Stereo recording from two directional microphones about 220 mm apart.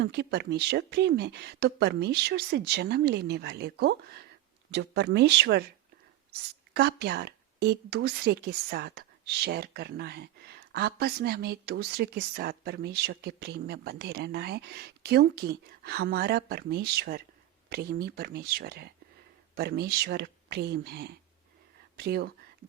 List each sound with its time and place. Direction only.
0.0 s speech: 50° right (ahead or behind)
6.7 s speech: 45° right (ahead or behind)